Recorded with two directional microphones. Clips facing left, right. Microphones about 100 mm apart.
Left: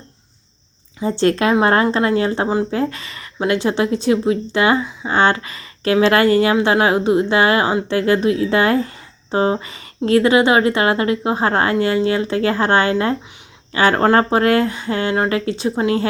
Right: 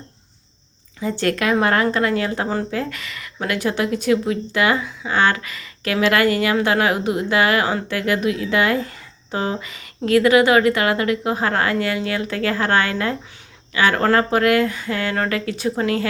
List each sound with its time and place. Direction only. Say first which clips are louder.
1.0 s a woman's voice: left 4 dB; 25° left (ahead or behind)